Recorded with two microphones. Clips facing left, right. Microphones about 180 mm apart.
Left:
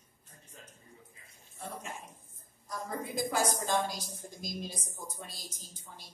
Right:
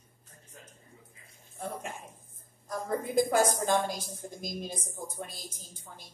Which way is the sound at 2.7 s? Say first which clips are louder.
Right 6 dB; 50° right (ahead or behind).